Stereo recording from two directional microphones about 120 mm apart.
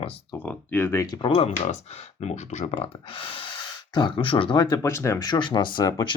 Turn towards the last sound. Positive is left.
turn(degrees=35)  # may be behind; listen again after turning